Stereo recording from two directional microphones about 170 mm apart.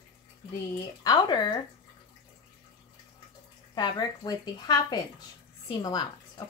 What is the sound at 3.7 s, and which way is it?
Speech, 25° left (ahead or behind).